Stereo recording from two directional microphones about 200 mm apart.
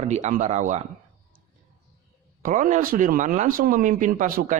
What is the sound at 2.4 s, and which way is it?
Speech, 40° right (ahead or behind).